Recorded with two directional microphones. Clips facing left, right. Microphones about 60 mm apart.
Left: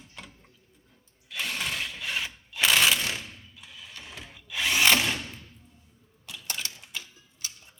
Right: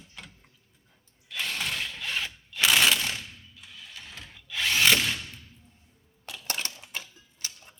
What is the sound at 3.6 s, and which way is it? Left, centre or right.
Drill, centre.